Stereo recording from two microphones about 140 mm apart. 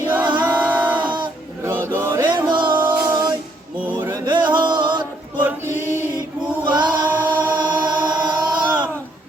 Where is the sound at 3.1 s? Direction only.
30° right (ahead or behind).